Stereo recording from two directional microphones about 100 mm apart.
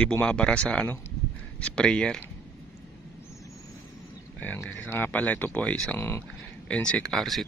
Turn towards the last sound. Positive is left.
turn(degrees=0)  # may be behind; listen again after turning